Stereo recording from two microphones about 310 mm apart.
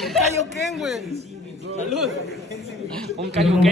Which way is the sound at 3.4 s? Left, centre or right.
Centre.